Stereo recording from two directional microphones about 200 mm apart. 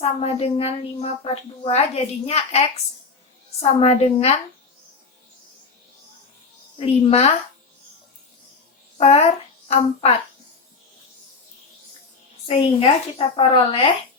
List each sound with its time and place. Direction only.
0.0 s a woman's voice: 30° left (ahead or behind)
6.7 s a woman's voice: 30° left (ahead or behind)
9.0 s a child's voice: 30° left (ahead or behind)
12.5 s a woman's voice: 25° left (ahead or behind)